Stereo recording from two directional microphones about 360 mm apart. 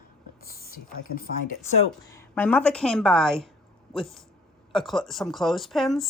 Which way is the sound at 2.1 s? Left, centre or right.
Centre.